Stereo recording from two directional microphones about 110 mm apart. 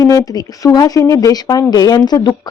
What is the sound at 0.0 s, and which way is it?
Speech, 35° left (ahead or behind).